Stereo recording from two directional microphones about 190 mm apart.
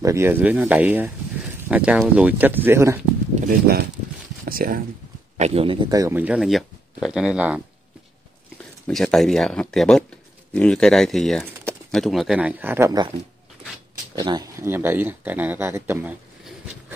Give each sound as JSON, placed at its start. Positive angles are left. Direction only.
{"t": 0.0, "sound": "speech", "side_deg": -15}
{"t": 3.3, "sound": "speech", "side_deg": -50}
{"t": 5.4, "sound": "speech", "side_deg": -30}
{"t": 8.8, "sound": "speech", "side_deg": 0}
{"t": 14.1, "sound": "speech", "side_deg": -20}